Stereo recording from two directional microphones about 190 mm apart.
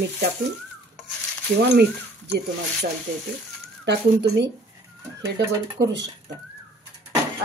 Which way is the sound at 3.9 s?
65° right (ahead or behind).